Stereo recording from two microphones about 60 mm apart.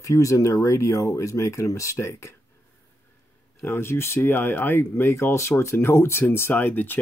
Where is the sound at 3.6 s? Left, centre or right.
Left.